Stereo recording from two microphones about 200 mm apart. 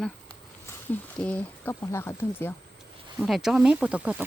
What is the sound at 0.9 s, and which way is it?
Speech, 5° left (ahead or behind).